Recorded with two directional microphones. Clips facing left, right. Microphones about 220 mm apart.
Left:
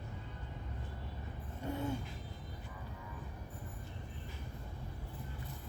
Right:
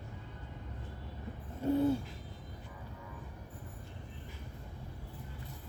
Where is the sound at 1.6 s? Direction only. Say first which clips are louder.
Right 9 dB; 35° right (ahead or behind).